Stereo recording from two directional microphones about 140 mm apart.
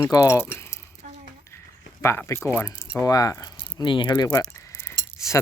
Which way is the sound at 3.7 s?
35° left (ahead or behind).